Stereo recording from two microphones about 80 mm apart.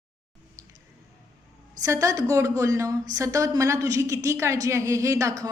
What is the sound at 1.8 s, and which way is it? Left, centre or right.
A woman's voice, right.